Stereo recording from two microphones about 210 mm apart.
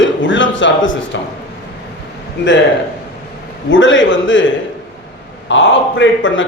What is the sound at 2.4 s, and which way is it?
Speech, 55° left (ahead or behind).